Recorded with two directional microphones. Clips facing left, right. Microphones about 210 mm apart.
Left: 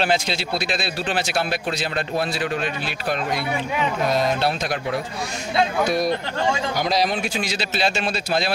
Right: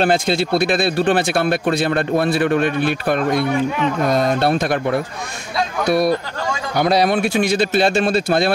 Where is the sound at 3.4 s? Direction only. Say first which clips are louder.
Right 6 dB; 10° left (ahead or behind).